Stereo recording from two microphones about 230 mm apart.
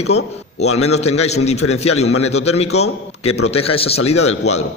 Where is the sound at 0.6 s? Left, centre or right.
Left.